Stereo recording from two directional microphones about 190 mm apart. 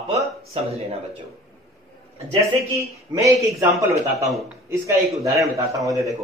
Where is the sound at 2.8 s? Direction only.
15° right (ahead or behind).